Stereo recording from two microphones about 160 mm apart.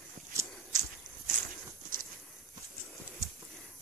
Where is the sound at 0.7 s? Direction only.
50° right (ahead or behind).